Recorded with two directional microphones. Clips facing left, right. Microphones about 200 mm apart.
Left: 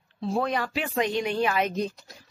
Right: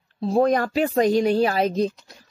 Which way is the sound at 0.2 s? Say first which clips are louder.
Right 8 dB; 40° right (ahead or behind).